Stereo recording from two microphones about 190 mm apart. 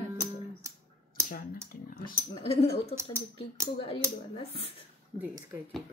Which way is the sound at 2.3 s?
30° left (ahead or behind).